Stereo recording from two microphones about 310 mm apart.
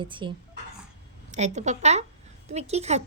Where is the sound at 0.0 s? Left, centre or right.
Centre.